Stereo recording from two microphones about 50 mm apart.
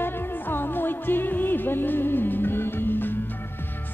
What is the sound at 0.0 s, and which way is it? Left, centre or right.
Music, left.